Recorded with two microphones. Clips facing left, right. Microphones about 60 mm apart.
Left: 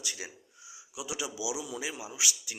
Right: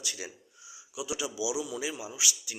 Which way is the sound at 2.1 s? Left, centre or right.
Left.